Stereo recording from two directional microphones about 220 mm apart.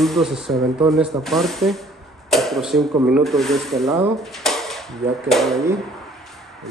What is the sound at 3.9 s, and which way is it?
Speech, 15° right (ahead or behind).